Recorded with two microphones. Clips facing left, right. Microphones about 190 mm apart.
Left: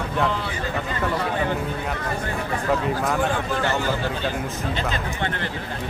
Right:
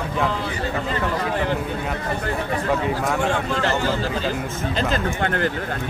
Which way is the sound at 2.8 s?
Centre (ahead or behind).